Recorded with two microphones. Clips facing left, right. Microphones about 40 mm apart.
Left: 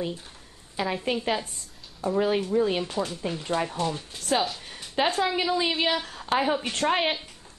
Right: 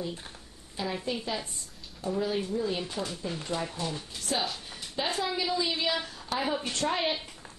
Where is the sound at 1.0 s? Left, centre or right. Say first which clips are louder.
Left 6 dB; left.